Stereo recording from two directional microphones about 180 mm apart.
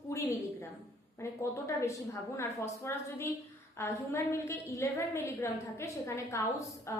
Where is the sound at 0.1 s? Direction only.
15° left (ahead or behind).